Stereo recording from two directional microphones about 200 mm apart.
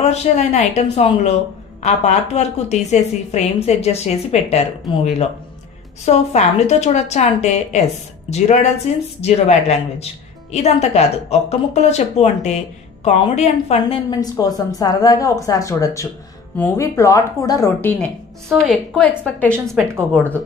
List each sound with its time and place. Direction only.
0.0 s a woman's voice: 35° left (ahead or behind)
14.3 s speech: 15° left (ahead or behind)
18.7 s a woman's voice: 5° left (ahead or behind)